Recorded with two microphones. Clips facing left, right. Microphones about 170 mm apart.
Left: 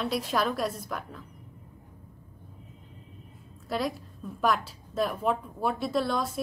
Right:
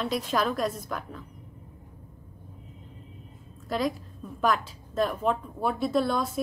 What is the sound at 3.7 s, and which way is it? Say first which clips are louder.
A woman's voice: right 2 dB; centre (ahead or behind).